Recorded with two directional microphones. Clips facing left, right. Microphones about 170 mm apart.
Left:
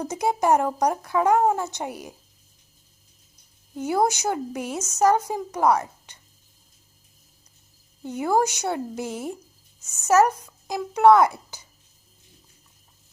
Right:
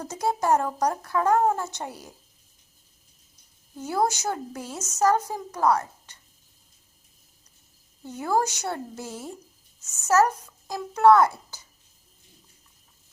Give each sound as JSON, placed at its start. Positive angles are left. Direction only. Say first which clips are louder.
{"t": 0.0, "sound": "a woman's voice", "louder": "left 3 dB", "side_deg": 15}
{"t": 3.8, "sound": "a woman's voice", "louder": "left 3 dB", "side_deg": 15}
{"t": 8.0, "sound": "a woman's voice", "louder": "left 3 dB", "side_deg": 20}